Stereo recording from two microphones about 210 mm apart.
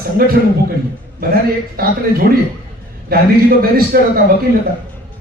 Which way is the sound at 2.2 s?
45° right (ahead or behind).